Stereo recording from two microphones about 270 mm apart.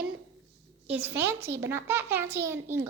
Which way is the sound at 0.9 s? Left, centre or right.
Centre.